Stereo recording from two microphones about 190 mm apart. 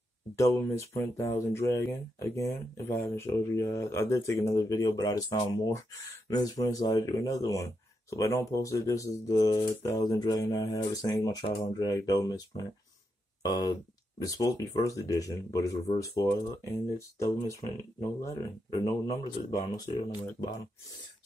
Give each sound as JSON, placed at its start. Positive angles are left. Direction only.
{"t": 0.4, "sound": "speech", "side_deg": 15}